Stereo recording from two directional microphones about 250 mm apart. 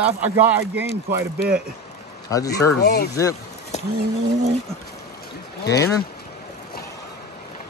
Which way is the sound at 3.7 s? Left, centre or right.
Left.